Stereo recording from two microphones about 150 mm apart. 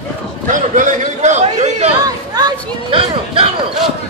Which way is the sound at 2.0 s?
25° right (ahead or behind).